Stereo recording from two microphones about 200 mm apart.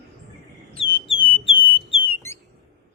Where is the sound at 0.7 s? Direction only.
25° left (ahead or behind).